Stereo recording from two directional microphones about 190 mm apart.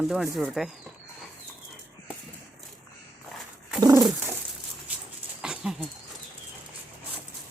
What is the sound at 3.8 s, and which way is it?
Bird, 20° right (ahead or behind).